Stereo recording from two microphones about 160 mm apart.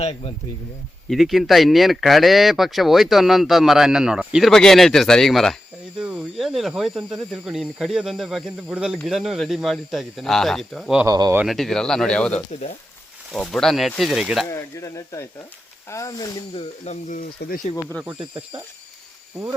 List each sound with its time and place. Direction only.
1.1 s speech: centre (ahead or behind)
11.0 s speech: 20° right (ahead or behind)
11.4 s speech: centre (ahead or behind)
12.5 s speech: 45° left (ahead or behind)
13.3 s speech: 5° left (ahead or behind)
14.5 s speech: 20° left (ahead or behind)
16.6 s speech: 45° left (ahead or behind)
18.0 s speech: 10° right (ahead or behind)